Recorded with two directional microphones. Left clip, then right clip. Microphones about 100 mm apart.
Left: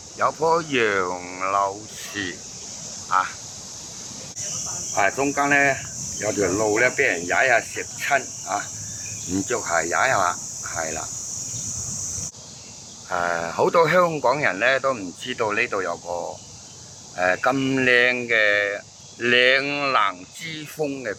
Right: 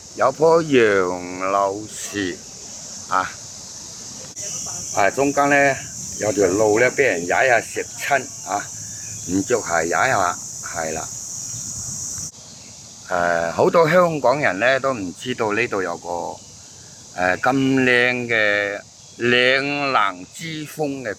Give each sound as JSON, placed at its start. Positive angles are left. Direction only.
{"t": 0.2, "sound": "speech", "side_deg": -20}
{"t": 4.9, "sound": "speech", "side_deg": -5}
{"t": 13.1, "sound": "speech", "side_deg": -10}